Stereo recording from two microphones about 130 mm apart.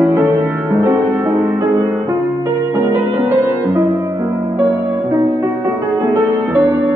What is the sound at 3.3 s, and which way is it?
Music, 15° right (ahead or behind).